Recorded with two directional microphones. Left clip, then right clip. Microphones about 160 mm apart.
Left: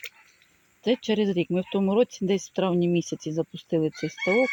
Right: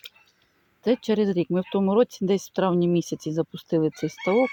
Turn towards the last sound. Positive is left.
turn(degrees=-20)  # may be behind; listen again after turning